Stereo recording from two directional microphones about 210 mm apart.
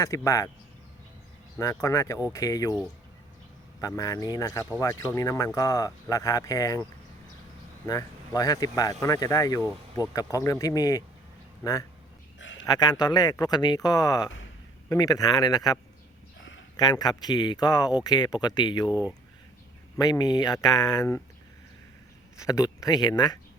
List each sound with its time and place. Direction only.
0.0 s speech: 15° left (ahead or behind)
1.5 s speech: 15° left (ahead or behind)
3.8 s speech: 15° left (ahead or behind)
7.9 s speech: 15° left (ahead or behind)
12.4 s a sound: 65° left (ahead or behind)
12.6 s speech: 20° left (ahead or behind)
16.7 s speech: 20° left (ahead or behind)
18.9 s speech: 5° right (ahead or behind)
20.0 s speech: 20° left (ahead or behind)
22.4 s speech: 15° left (ahead or behind)